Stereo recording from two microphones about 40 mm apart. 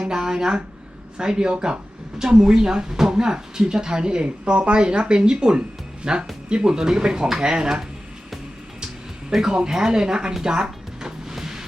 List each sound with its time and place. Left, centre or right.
0.0 s a sound: centre
1.2 s speech: right
9.3 s speech: centre
9.6 s speech: centre
10.4 s music: centre